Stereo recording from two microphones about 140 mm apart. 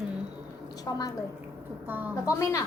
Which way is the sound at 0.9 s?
25° left (ahead or behind).